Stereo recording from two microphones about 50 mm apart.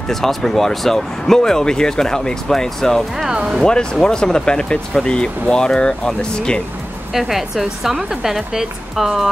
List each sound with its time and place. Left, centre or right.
0.1 s speech: centre
3.3 s speech: centre
3.6 s speech: centre
7.2 s a woman's voice: centre